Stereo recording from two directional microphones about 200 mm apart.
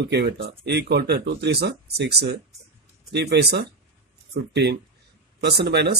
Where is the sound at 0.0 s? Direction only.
55° right (ahead or behind).